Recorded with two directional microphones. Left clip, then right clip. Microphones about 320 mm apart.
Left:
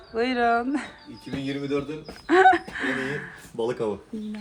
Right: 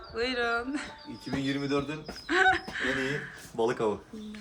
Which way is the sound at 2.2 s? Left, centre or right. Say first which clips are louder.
Left 7 dB; centre.